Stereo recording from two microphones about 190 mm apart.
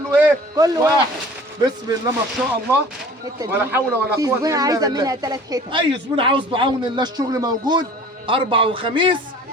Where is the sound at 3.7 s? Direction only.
15° right (ahead or behind).